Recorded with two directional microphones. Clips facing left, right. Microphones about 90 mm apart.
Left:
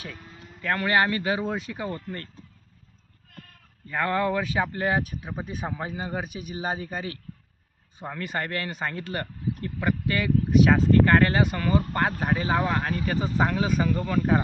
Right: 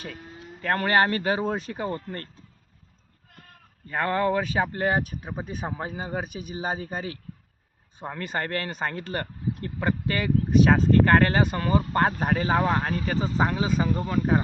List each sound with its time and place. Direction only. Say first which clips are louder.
0.6 s speech: right 1 dB; 35° right (ahead or behind)
3.8 s speech: right 1 dB; 20° right (ahead or behind)
7.9 s speech: right 1 dB; 20° right (ahead or behind)